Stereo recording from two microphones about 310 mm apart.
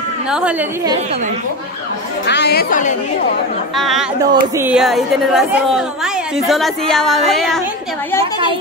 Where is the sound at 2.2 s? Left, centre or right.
Left.